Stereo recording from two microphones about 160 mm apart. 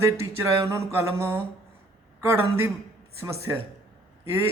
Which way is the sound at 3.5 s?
20° right (ahead or behind).